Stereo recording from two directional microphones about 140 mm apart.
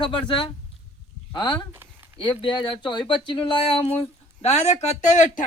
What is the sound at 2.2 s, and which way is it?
Speech, 35° left (ahead or behind).